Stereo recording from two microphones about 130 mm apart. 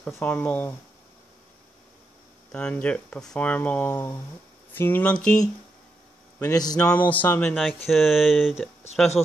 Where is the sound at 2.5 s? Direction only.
10° left (ahead or behind).